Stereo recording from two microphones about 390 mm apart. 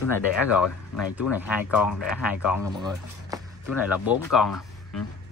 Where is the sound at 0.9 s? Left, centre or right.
Centre.